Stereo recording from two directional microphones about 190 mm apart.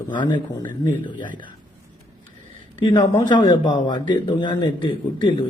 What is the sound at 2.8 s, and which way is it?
A man's voice, 25° left (ahead or behind).